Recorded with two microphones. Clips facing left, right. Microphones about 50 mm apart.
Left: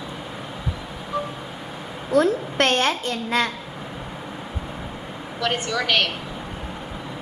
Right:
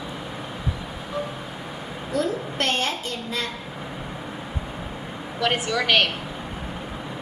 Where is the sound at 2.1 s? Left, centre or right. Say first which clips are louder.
Left 6 dB; left.